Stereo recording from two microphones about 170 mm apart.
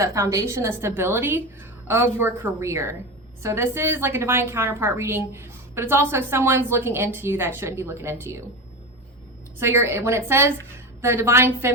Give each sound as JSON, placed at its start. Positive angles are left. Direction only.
{"t": 0.0, "sound": "a woman's voice", "side_deg": -20}
{"t": 9.6, "sound": "a woman's voice", "side_deg": -15}